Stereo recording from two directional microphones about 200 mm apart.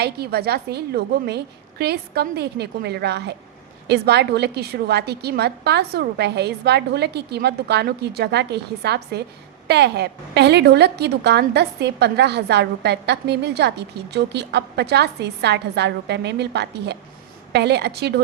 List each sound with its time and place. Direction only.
0.0 s a woman's voice: 50° right (ahead or behind)